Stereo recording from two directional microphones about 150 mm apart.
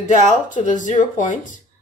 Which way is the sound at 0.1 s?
60° left (ahead or behind).